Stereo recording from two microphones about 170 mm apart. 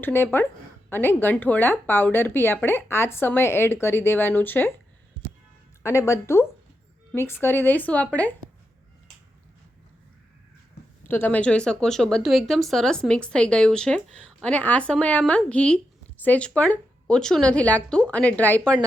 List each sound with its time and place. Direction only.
0.0 s speech: 10° left (ahead or behind)
5.8 s speech: 15° left (ahead or behind)
11.1 s speech: 10° left (ahead or behind)